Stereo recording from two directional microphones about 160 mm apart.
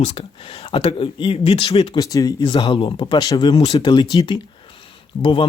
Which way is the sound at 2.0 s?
20° left (ahead or behind).